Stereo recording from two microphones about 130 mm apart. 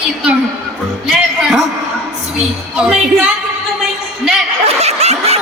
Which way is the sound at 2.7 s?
5° right (ahead or behind).